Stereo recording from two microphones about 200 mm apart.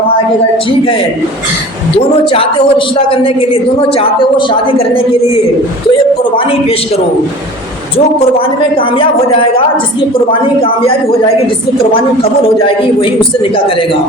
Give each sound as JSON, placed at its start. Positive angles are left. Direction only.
{"t": 2.3, "sound": "speech", "side_deg": 25}
{"t": 6.3, "sound": "speech", "side_deg": 30}
{"t": 10.4, "sound": "speech", "side_deg": 25}
{"t": 12.2, "sound": "speech", "side_deg": 25}